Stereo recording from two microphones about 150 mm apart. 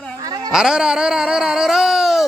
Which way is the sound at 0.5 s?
5° right (ahead or behind).